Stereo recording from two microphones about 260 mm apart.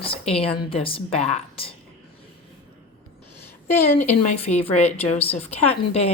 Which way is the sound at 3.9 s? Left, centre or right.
Left.